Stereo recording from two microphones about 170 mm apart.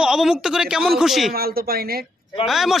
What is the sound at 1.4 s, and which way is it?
Speech, 65° right (ahead or behind).